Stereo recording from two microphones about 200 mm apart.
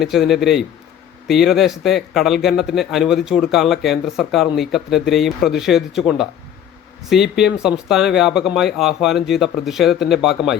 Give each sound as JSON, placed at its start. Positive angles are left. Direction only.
{"t": 0.0, "sound": "speech", "side_deg": 0}